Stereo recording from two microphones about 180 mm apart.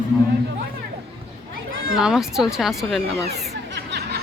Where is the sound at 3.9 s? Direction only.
65° right (ahead or behind).